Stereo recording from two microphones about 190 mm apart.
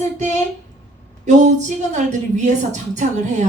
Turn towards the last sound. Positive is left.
turn(degrees=-40)  # may be behind; listen again after turning